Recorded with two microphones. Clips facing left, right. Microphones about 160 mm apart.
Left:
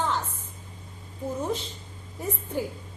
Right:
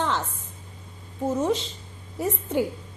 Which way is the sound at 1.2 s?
90° right.